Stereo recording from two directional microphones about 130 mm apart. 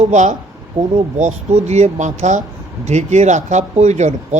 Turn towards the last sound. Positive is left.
turn(degrees=-60)  # may be behind; listen again after turning